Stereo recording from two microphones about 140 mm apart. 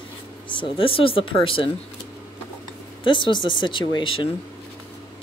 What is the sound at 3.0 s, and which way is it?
Speech, 35° left (ahead or behind).